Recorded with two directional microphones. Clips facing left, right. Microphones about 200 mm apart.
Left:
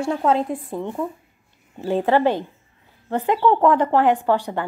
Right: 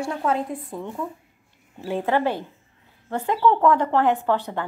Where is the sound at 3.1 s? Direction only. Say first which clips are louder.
Left 2 dB; 20° left (ahead or behind).